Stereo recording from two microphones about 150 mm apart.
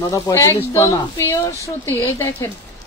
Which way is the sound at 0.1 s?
20° left (ahead or behind).